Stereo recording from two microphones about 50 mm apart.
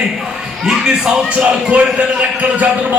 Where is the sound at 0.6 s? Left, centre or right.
Centre.